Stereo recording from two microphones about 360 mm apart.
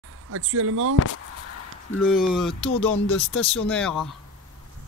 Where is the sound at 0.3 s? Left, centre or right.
Right.